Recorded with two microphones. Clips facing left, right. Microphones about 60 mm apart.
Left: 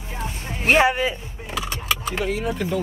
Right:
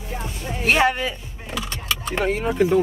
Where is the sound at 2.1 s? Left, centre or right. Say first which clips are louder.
Right 6 dB; right.